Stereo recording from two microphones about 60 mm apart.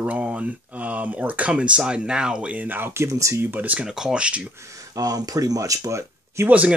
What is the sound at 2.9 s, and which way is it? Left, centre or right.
Speech, right.